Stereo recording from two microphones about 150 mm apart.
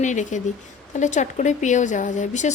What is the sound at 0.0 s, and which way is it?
Speech, 55° left (ahead or behind).